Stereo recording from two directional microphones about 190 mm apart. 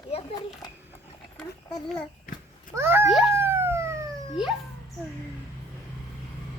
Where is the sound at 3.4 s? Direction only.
10° right (ahead or behind).